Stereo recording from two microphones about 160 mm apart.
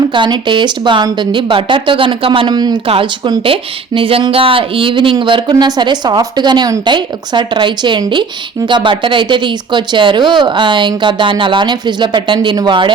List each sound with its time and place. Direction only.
0.1 s speech: 30° right (ahead or behind)